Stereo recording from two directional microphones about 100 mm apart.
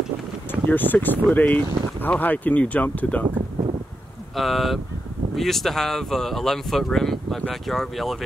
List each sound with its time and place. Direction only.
0.5 s speech: 20° left (ahead or behind)
4.4 s speech: centre (ahead or behind)